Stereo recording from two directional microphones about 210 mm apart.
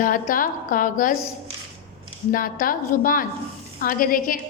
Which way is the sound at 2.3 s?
40° left (ahead or behind).